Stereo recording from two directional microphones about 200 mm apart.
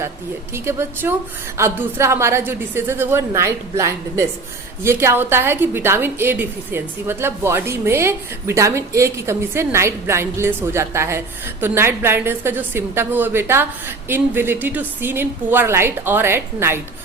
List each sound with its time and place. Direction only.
0.5 s a woman's voice: 15° right (ahead or behind)